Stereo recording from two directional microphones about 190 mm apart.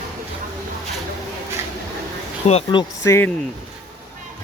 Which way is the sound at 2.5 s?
35° left (ahead or behind).